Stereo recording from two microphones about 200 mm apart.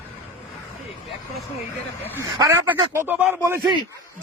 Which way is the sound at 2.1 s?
10° right (ahead or behind).